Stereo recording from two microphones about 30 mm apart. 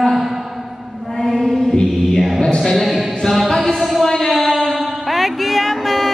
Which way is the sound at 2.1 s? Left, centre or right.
Centre.